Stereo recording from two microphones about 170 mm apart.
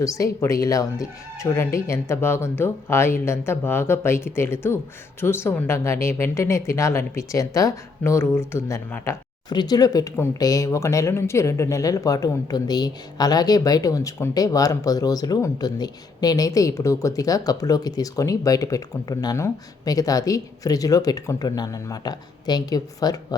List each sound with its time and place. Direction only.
0.0 s speech: 20° left (ahead or behind)